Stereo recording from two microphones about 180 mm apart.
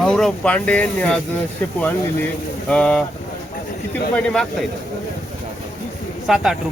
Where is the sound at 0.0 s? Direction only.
Centre (ahead or behind).